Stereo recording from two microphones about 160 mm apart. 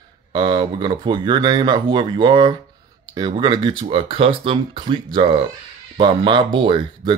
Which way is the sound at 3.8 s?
35° right (ahead or behind).